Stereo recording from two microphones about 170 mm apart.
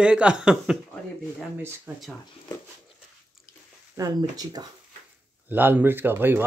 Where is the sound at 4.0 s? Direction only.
25° right (ahead or behind).